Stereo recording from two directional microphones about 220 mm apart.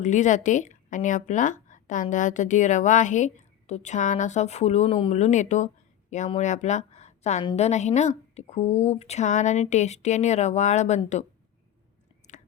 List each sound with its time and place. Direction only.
0.0 s a woman's voice: 35° left (ahead or behind)
12.2 s chewing: 30° left (ahead or behind)